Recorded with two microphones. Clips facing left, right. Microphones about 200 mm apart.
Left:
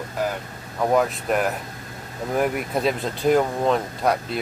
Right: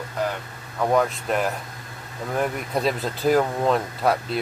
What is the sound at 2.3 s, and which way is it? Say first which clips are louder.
Speech: left 2 dB; centre (ahead or behind).